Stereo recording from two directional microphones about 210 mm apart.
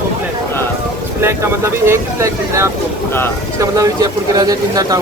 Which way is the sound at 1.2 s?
10° right (ahead or behind).